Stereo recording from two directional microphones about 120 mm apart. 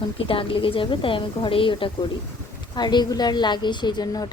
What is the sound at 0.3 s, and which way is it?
A woman's voice, 45° left (ahead or behind).